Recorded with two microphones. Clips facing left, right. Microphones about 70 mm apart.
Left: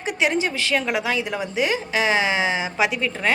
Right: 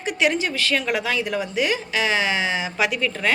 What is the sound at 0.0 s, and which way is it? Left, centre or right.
A woman's voice, left.